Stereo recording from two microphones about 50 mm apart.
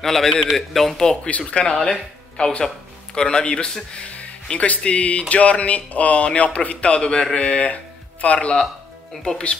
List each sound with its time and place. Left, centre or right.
0.0 s a man's voice: centre; by 8.5 s left